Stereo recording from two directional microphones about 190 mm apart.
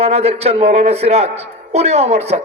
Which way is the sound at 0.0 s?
35° right (ahead or behind).